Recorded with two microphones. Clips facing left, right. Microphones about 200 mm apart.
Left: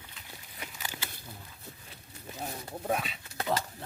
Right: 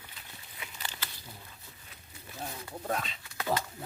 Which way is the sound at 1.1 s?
55° left (ahead or behind).